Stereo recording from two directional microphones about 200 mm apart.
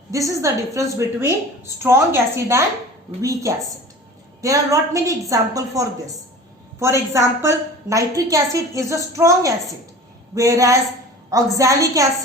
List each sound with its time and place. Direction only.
0.1 s a woman's voice: 15° right (ahead or behind)